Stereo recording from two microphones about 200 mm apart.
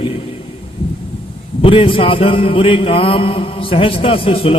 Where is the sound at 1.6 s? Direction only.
25° left (ahead or behind).